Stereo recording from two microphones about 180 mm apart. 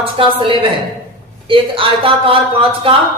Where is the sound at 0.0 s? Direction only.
30° right (ahead or behind).